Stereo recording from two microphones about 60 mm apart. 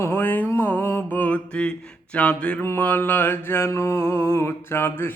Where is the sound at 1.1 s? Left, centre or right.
Left.